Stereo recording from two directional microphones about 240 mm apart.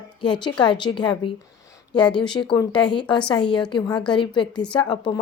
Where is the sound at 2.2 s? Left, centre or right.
Centre.